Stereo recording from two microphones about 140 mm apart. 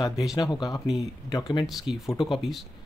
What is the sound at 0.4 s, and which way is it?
Speech, 30° left (ahead or behind).